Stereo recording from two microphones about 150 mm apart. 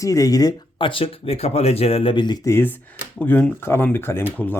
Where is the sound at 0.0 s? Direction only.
20° left (ahead or behind).